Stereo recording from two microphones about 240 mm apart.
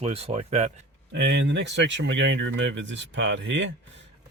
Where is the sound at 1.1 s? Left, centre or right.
Right.